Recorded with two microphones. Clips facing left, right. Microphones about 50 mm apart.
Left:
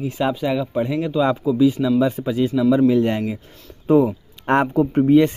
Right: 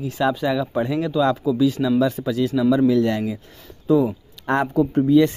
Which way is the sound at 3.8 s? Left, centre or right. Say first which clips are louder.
Left 2 dB; left.